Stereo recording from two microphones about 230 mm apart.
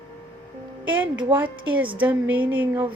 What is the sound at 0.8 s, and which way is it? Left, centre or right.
A woman's voice, centre.